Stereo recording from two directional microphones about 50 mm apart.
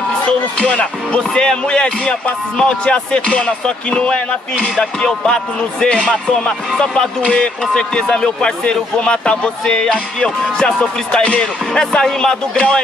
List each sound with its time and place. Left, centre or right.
0.6 s speech: centre